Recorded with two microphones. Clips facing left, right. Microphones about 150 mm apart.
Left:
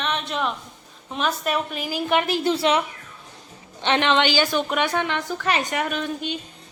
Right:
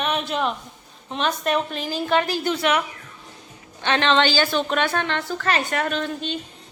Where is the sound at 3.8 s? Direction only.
15° left (ahead or behind).